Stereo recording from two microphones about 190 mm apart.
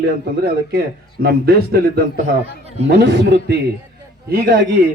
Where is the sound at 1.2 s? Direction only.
55° right (ahead or behind).